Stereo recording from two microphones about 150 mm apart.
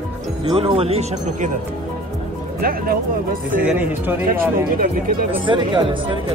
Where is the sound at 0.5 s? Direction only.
40° right (ahead or behind).